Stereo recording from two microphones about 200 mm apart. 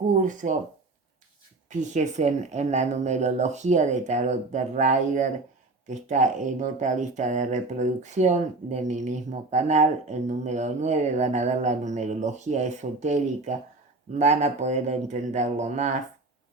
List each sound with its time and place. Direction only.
0.2 s speech: 40° right (ahead or behind)
1.7 s speech: 40° right (ahead or behind)